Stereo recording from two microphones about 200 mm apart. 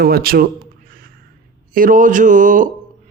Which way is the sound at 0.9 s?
45° right (ahead or behind).